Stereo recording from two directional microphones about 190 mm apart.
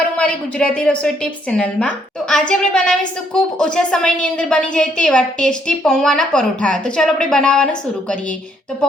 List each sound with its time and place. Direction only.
0.2 s a woman's voice: 5° left (ahead or behind)